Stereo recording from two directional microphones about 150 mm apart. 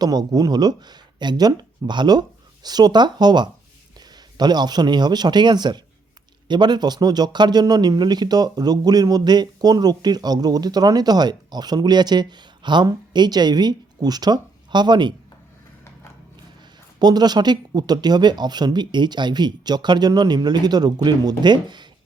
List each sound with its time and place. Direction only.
0.0 s speech: 25° right (ahead or behind)
17.0 s speech: 25° right (ahead or behind)